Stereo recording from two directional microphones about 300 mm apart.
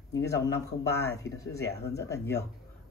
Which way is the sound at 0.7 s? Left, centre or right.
Left.